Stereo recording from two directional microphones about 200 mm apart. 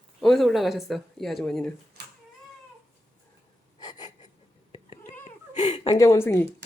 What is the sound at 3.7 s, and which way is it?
Gasp, 20° left (ahead or behind).